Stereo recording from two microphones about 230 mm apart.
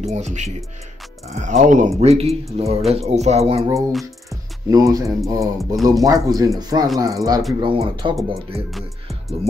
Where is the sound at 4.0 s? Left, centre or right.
Centre.